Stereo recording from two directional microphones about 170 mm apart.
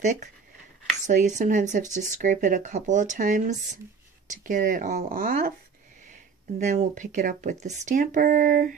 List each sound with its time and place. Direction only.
1.0 s speech: 50° right (ahead or behind)
6.6 s speech: 50° right (ahead or behind)